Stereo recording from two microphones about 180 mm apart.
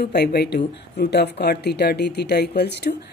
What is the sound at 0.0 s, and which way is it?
Speech, 65° left (ahead or behind).